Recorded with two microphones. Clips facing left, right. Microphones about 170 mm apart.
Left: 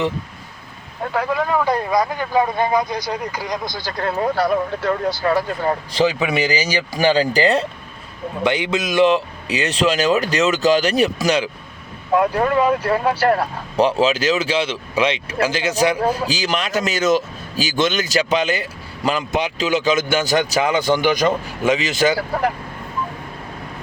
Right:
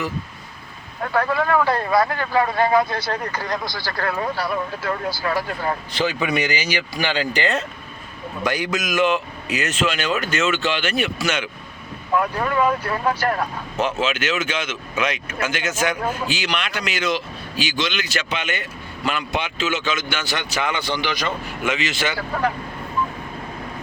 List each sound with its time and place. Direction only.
1.1 s speech: 10° left (ahead or behind)
4.2 s speech: 45° left (ahead or behind)
5.2 s speech: 30° left (ahead or behind)